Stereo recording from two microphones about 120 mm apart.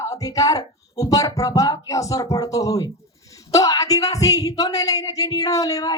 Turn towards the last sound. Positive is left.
turn(degrees=30)  # may be behind; listen again after turning